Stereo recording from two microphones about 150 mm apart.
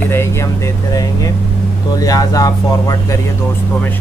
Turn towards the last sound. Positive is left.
turn(degrees=25)  # may be behind; listen again after turning